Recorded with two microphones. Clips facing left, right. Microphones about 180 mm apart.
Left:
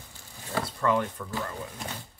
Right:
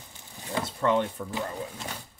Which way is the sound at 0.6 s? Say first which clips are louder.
Right 1 dB; 20° right (ahead or behind).